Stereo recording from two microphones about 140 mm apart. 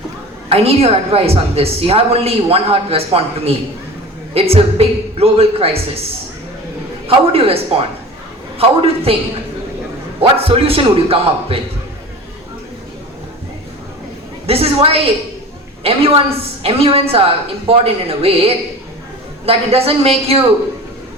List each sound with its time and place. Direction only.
0.5 s a woman's voice: 45° right (ahead or behind)
7.1 s a woman's voice: 45° right (ahead or behind)
10.2 s a woman's voice: 40° right (ahead or behind)
14.4 s a woman's voice: 45° right (ahead or behind)